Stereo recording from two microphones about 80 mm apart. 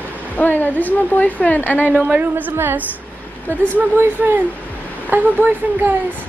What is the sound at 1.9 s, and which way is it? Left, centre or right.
Speech, right.